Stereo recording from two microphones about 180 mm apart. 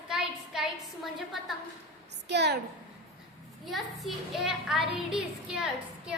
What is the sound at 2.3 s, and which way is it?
Speech, 70° right (ahead or behind).